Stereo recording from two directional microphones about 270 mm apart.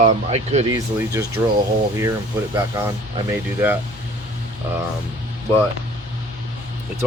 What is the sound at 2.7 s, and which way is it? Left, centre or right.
Speech, centre.